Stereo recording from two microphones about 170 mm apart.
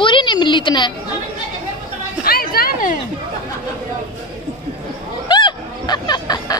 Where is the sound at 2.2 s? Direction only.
60° left (ahead or behind).